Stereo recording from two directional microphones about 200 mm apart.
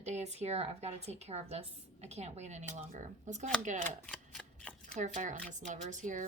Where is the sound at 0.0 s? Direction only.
35° right (ahead or behind).